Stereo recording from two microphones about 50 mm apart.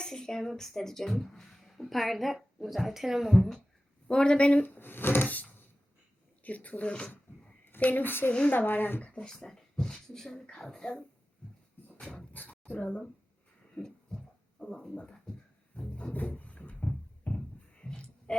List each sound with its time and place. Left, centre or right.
0.0 s speech: centre
4.1 s speech: centre
4.6 s speech: left
7.9 s a woman's voice: left
9.0 s speech: centre
12.0 s goat: left
13.7 s a sound: centre
15.3 s music: centre
15.7 s music: left
16.1 s a sound: left